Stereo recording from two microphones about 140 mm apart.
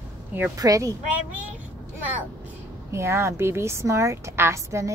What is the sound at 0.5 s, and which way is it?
Speech, 25° right (ahead or behind).